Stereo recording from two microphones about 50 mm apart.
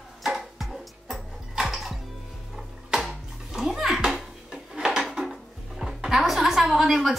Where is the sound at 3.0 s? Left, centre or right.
Centre.